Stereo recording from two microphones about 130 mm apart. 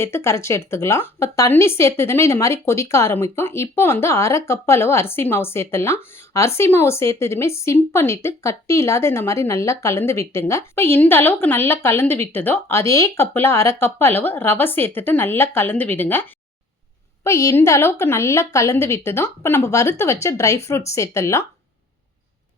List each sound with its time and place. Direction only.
0.0 s a woman's voice: 20° left (ahead or behind)
17.2 s a woman's voice: 20° left (ahead or behind)